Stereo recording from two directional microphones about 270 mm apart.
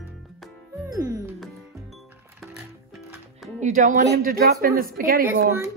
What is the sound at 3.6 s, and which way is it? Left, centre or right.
Speech, right.